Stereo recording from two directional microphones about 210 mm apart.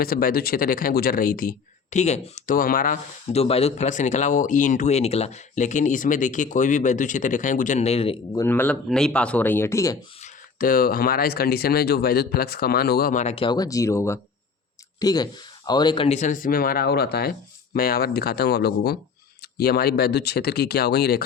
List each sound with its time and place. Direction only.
0.0 s speech: 45° left (ahead or behind); by 10.0 s 15° left (ahead or behind)
10.2 s speech: 40° left (ahead or behind)